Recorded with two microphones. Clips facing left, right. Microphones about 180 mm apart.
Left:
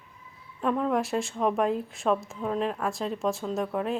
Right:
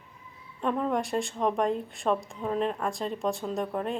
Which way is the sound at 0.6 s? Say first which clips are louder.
Left 2 dB; centre (ahead or behind).